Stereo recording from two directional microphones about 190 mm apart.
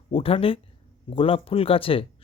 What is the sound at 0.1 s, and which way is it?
Speech, 30° left (ahead or behind).